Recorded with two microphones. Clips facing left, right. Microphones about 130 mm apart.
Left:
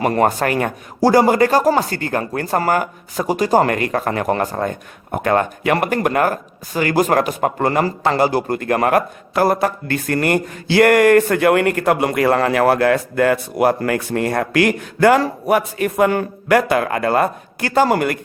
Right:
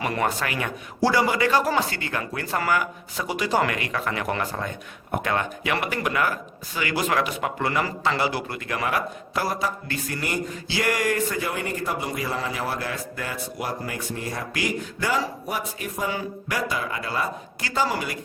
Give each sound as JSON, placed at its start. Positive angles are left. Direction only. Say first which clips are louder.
{"t": 0.0, "sound": "a man's voice", "louder": "left 9 dB", "side_deg": 45}